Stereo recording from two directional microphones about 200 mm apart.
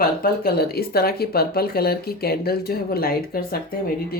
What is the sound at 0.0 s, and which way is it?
Speech, 50° left (ahead or behind).